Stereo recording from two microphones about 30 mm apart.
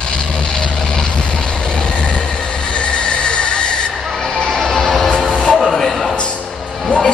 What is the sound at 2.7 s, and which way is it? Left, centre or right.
Train, left.